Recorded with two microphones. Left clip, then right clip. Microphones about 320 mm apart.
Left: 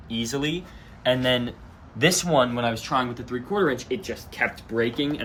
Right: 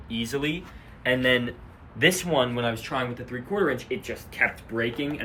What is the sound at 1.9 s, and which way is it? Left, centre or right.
Speech, left.